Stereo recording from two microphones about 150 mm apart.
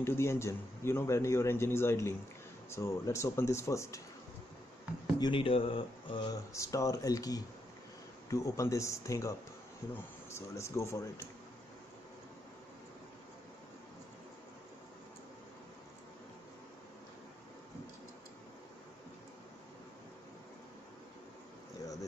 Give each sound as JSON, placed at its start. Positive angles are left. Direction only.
{"t": 0.0, "sound": "a man's voice", "side_deg": 15}
{"t": 5.2, "sound": "speech", "side_deg": 35}